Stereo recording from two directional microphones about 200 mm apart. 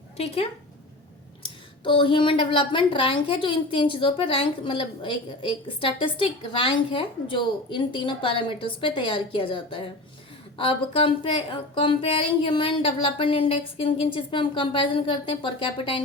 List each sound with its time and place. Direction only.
0.2 s a woman's voice: 30° left (ahead or behind)